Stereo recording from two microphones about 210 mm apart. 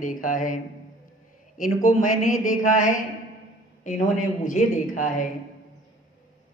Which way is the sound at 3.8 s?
35° left (ahead or behind).